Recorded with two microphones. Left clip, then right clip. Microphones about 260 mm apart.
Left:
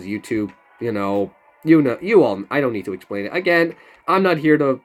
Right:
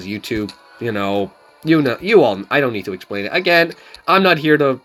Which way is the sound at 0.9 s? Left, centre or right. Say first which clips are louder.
Right 2 dB; centre.